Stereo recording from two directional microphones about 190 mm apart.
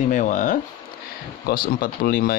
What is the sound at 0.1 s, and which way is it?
Speech, 45° left (ahead or behind).